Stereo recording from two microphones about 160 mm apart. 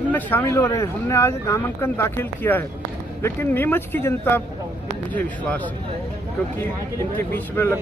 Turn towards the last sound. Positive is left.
turn(degrees=15)  # may be behind; listen again after turning